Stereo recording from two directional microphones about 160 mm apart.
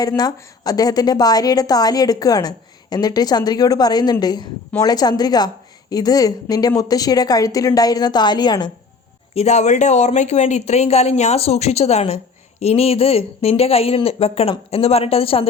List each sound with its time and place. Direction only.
0.2 s a woman's voice: 25° left (ahead or behind)
9.3 s speech: 45° left (ahead or behind)